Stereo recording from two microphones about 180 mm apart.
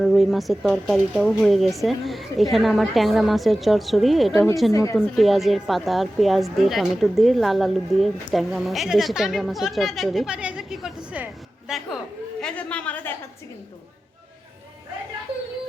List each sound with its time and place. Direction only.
0.0 s speech: centre (ahead or behind)
4.7 s a woman's voice: 15° left (ahead or behind)
4.9 s a woman's voice: centre (ahead or behind)